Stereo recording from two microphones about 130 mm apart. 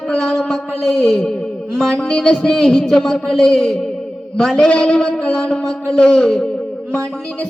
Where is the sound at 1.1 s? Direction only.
5° left (ahead or behind).